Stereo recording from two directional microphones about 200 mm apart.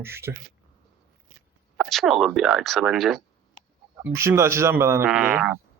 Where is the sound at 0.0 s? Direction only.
10° right (ahead or behind).